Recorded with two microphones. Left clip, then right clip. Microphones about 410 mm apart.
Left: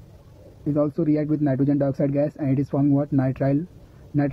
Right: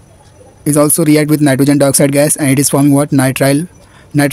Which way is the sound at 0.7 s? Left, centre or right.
Left.